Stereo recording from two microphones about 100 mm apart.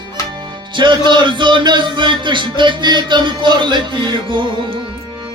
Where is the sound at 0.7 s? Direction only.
50° right (ahead or behind).